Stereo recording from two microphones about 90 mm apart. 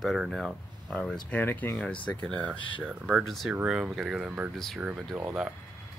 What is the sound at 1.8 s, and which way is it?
Speech, 10° left (ahead or behind).